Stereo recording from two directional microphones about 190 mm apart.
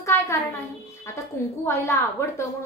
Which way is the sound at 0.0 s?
15° left (ahead or behind).